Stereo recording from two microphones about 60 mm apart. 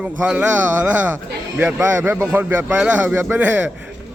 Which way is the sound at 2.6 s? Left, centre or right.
Right.